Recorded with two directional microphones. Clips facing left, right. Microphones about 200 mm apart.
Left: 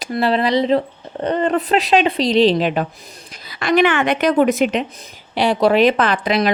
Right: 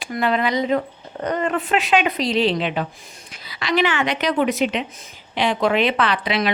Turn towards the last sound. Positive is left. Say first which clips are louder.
# left 4 dB
turn(degrees=40)  # may be behind; listen again after turning